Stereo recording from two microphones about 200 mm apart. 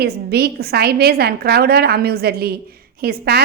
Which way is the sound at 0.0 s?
50° right (ahead or behind).